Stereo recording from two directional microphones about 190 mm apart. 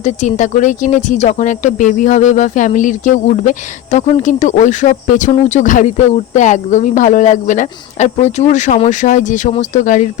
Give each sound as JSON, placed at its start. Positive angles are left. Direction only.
{"t": 0.0, "sound": "speech", "side_deg": 40}